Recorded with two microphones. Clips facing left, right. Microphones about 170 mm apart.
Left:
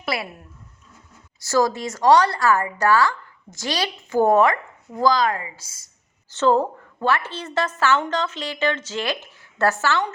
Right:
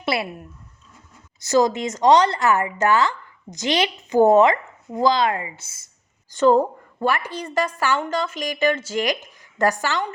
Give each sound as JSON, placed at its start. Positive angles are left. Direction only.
{"t": 0.0, "sound": "a sound", "side_deg": -25}
{"t": 1.4, "sound": "a woman's voice", "side_deg": -20}
{"t": 6.3, "sound": "a woman's voice", "side_deg": -15}